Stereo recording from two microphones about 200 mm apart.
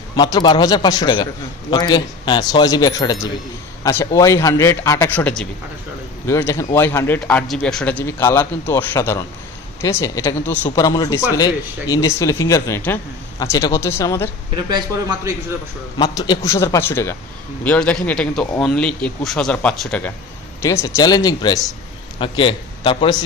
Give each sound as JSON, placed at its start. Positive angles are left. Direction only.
{"t": 0.1, "sound": "a man's voice", "side_deg": 20}
{"t": 14.5, "sound": "a man's voice", "side_deg": -20}
{"t": 16.0, "sound": "a man's voice", "side_deg": 20}